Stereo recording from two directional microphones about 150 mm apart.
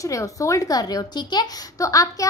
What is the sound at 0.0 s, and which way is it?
A woman's voice, 20° left (ahead or behind).